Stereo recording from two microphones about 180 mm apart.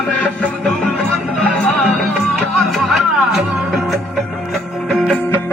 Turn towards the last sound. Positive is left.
turn(degrees=5)  # may be behind; listen again after turning